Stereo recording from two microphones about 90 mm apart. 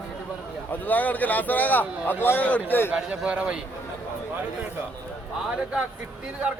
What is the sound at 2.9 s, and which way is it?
Speech, 15° right (ahead or behind).